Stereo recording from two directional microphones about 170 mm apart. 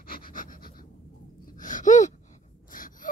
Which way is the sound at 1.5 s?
50° left (ahead or behind).